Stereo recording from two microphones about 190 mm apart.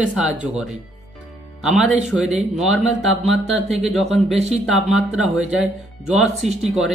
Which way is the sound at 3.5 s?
5° right (ahead or behind).